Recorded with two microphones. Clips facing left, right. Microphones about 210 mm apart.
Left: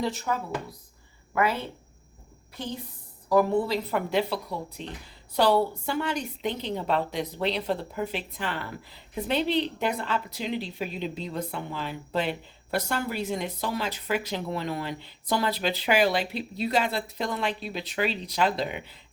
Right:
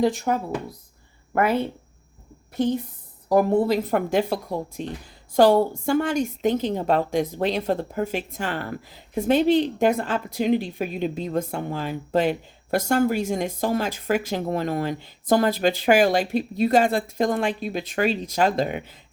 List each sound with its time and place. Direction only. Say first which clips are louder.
0.3 s a woman's voice: right 5 dB; 50° right (ahead or behind)
3.2 s a woman's voice: right 4 dB; 45° right (ahead or behind)